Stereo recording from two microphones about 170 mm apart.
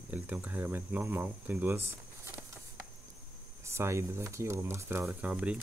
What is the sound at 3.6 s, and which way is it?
Speech, 15° right (ahead or behind).